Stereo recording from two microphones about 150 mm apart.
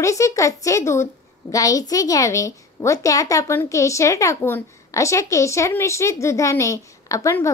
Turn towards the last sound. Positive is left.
turn(degrees=20)  # may be behind; listen again after turning